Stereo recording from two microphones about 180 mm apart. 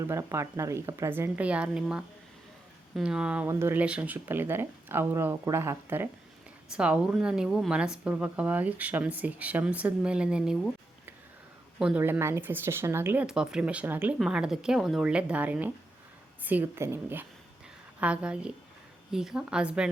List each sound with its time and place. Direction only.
0.0 s speech: 15° right (ahead or behind)
11.8 s speech: 10° right (ahead or behind)